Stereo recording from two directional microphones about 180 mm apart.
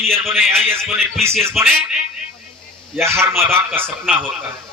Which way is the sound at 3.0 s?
15° right (ahead or behind).